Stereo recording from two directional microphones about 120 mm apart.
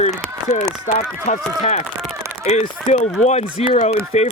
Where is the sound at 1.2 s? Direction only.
75° left (ahead or behind).